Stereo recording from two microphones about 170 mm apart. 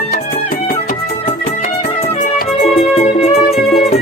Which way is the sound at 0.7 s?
50° left (ahead or behind).